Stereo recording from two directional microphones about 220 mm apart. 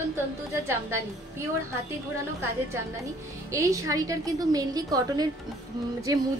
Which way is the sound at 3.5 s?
15° right (ahead or behind).